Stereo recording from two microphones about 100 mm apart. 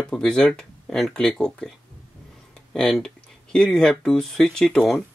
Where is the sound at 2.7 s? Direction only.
5° left (ahead or behind).